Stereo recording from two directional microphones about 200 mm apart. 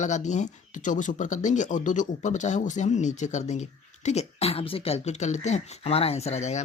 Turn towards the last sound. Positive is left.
turn(degrees=35)  # may be behind; listen again after turning